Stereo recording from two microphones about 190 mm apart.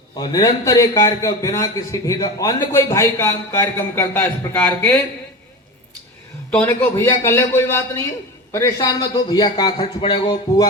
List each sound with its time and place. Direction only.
0.2 s a man's voice: 20° left (ahead or behind)
6.7 s a man's voice: 15° left (ahead or behind)